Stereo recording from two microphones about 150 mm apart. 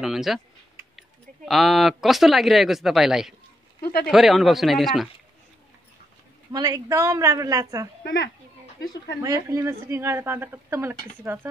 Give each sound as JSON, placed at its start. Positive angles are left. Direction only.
{"t": 0.0, "sound": "speech", "side_deg": 0}
{"t": 3.8, "sound": "speech", "side_deg": 90}
{"t": 4.1, "sound": "speech", "side_deg": 0}
{"t": 6.5, "sound": "a woman's voice", "side_deg": -25}
{"t": 8.0, "sound": "speech", "side_deg": 90}
{"t": 9.2, "sound": "a woman's voice", "side_deg": -20}